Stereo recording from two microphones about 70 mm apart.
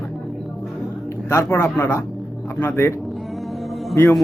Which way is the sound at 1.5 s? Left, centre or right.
Left.